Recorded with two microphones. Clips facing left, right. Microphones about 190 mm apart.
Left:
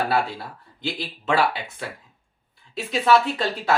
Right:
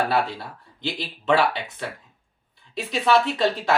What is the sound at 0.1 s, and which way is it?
Speech, 5° left (ahead or behind).